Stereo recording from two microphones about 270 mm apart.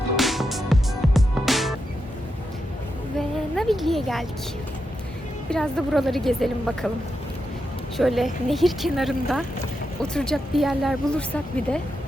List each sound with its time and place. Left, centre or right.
0.2 s music: centre
3.2 s a sound: centre
5.5 s a woman's voice: centre
7.9 s a woman's voice: centre